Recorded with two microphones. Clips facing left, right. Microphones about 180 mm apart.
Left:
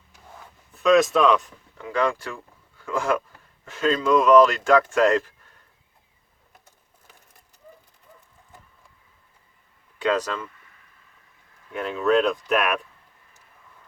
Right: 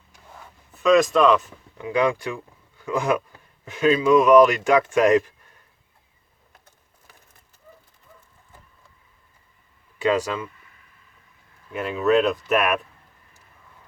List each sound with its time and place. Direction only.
0.7 s speech: centre (ahead or behind)
1.8 s speech: 15° right (ahead or behind)
10.0 s speech: 10° right (ahead or behind)
11.7 s speech: 5° right (ahead or behind)